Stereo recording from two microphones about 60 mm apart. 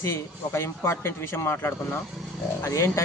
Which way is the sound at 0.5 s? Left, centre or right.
Left.